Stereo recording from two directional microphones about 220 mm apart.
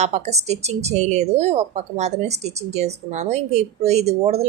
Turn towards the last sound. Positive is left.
turn(degrees=-30)  # may be behind; listen again after turning